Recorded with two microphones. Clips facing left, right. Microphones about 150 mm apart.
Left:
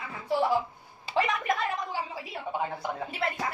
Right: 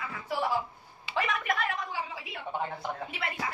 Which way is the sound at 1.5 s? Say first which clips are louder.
Left 2 dB; 35° left (ahead or behind).